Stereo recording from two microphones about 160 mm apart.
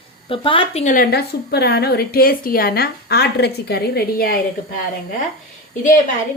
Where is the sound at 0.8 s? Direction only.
60° left (ahead or behind).